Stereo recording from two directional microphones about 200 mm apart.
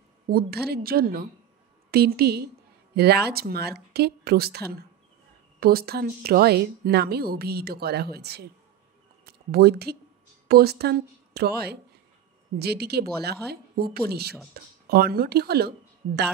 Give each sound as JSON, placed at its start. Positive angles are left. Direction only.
{"t": 0.3, "sound": "speech", "side_deg": -50}